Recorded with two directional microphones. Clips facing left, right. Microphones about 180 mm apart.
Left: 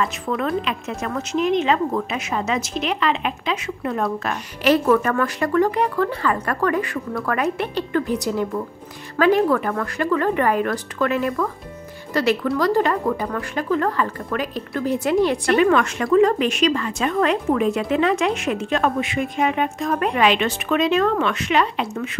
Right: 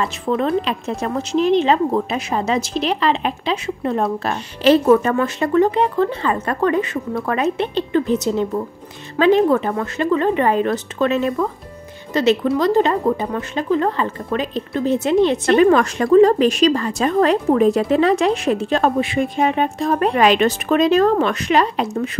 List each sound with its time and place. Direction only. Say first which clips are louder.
0.0 s speech: right 3 dB; 30° right (ahead or behind)
15.6 s a woman's voice: right 5 dB; 35° right (ahead or behind)